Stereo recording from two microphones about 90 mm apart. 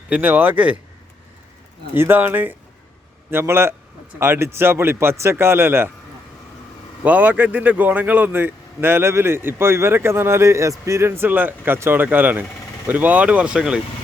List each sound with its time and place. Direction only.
0.1 s speech: 20° right (ahead or behind)
1.9 s speech: 25° right (ahead or behind)
7.0 s speech: 20° right (ahead or behind)